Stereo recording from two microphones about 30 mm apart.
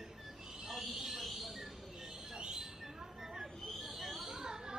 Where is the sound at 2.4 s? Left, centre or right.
Right.